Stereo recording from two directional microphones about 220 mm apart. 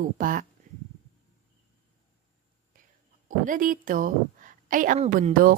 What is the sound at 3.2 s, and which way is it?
A woman's voice, 35° right (ahead or behind).